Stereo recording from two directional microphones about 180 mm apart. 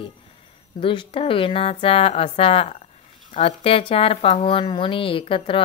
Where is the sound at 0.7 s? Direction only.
30° left (ahead or behind).